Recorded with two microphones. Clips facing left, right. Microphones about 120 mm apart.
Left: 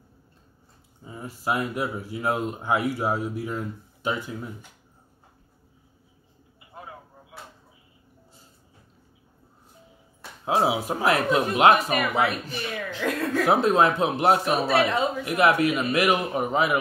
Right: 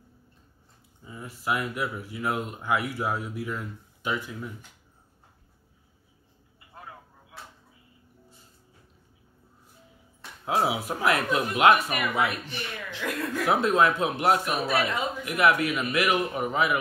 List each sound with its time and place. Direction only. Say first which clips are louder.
1.0 s speech: left 3 dB; 30° left (ahead or behind)
10.4 s speech: left 3 dB; 25° left (ahead or behind)